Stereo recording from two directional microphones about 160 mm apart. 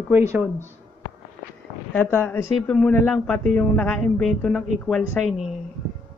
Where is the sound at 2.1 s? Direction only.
15° left (ahead or behind).